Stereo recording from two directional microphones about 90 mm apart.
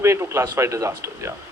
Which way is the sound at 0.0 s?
30° right (ahead or behind).